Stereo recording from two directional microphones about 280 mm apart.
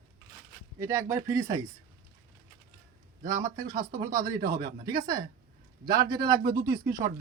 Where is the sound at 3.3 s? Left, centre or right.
Right.